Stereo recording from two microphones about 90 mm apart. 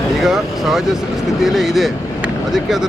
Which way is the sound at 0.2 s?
5° right (ahead or behind).